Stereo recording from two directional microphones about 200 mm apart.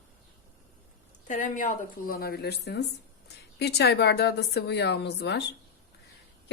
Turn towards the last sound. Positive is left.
turn(degrees=60)  # may be behind; listen again after turning